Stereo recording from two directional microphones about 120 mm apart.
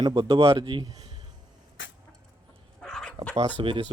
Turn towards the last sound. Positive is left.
turn(degrees=-45)  # may be behind; listen again after turning